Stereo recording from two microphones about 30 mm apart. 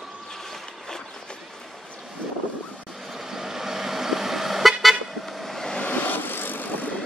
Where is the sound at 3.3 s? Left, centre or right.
Centre.